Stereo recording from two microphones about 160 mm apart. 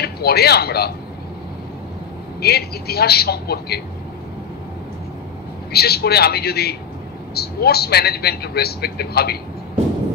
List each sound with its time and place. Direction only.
0.0 s speech: 80° left
2.4 s a man's voice: 80° left
5.7 s a man's voice: 80° left